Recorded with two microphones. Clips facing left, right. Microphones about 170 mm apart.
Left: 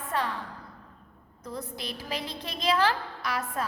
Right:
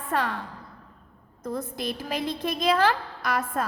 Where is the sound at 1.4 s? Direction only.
50° right (ahead or behind).